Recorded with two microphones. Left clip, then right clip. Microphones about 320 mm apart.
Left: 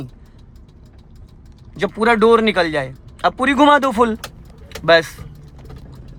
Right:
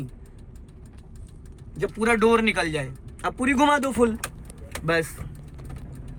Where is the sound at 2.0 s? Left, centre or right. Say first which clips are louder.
Left 7 dB; centre.